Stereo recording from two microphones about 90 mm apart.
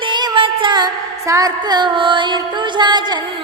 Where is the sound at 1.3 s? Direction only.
45° right (ahead or behind).